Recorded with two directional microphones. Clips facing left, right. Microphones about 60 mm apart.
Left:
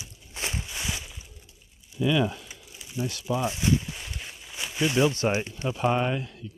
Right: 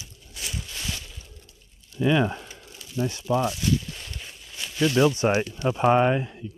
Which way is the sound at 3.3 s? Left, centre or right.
Left.